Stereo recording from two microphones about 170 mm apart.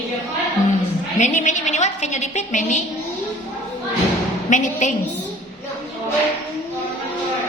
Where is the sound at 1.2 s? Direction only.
45° left (ahead or behind).